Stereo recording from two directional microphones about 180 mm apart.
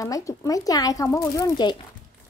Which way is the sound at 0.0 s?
20° left (ahead or behind).